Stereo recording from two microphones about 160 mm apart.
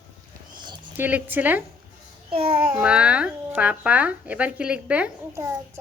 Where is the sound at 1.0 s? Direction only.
10° right (ahead or behind).